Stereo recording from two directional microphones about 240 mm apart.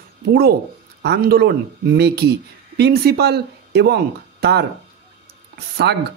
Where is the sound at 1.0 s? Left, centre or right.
Right.